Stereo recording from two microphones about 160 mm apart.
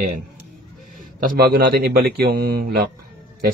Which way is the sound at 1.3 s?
75° right (ahead or behind).